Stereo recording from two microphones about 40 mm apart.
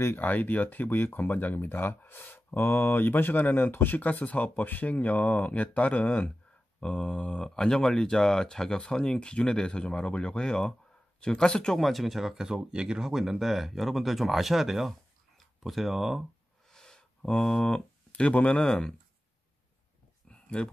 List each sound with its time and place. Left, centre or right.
0.2 s speech: left
3.7 s speech: left
4.0 s speech: left
11.7 s speech: centre
16.6 s a sound: centre
17.6 s speech: left
20.2 s a sound: left